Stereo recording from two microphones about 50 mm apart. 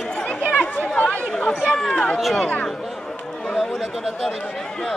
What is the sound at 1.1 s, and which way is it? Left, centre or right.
Chatter, centre.